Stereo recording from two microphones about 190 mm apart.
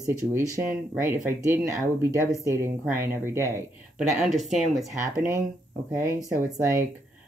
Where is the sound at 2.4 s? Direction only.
15° right (ahead or behind).